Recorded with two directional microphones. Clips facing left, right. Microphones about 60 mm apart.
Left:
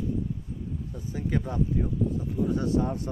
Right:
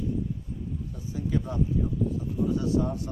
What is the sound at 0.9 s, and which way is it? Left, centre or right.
Speech, left.